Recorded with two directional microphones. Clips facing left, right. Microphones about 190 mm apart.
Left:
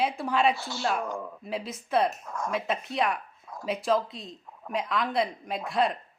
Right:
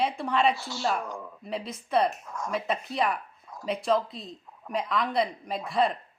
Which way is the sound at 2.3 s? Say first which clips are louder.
Left 2 dB; 55° left (ahead or behind).